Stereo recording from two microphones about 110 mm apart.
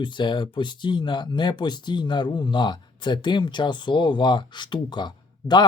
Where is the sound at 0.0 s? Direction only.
45° left (ahead or behind).